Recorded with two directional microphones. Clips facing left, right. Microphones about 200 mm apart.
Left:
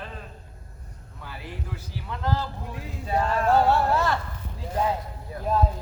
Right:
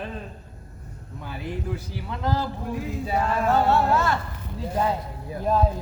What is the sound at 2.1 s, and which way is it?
Speech, 15° right (ahead or behind).